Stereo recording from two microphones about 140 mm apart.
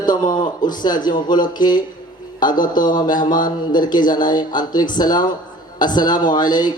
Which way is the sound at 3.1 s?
70° left (ahead or behind).